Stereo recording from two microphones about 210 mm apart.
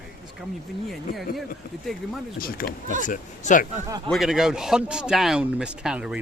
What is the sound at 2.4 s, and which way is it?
Speech, 45° left (ahead or behind).